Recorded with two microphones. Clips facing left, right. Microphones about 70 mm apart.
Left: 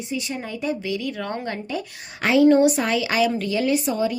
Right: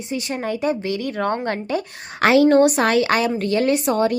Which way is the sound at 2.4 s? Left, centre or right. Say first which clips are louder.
Right 2 dB; right.